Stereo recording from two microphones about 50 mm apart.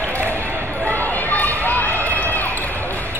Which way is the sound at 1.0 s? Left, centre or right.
Left.